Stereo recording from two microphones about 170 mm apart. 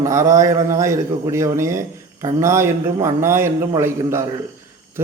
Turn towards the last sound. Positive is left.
turn(degrees=-15)  # may be behind; listen again after turning